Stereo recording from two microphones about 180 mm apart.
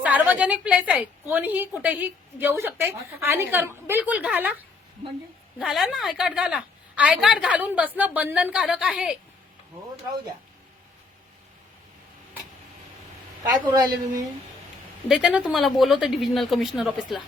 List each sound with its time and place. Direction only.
0.0 s a woman's voice: 10° right (ahead or behind)
5.5 s a woman's voice: 5° right (ahead or behind)
13.7 s a woman's voice: 20° right (ahead or behind)
15.0 s a woman's voice: 5° right (ahead or behind)